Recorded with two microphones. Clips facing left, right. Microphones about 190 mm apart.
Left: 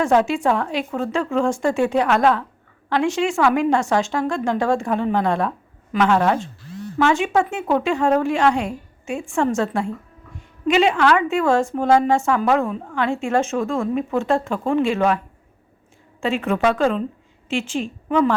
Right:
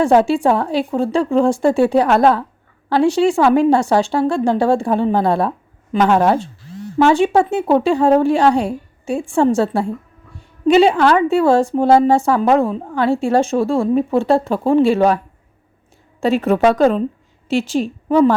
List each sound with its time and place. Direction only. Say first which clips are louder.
0.0 s a woman's voice: right 5 dB; 30° right (ahead or behind)
16.2 s a woman's voice: right 6 dB; 40° right (ahead or behind)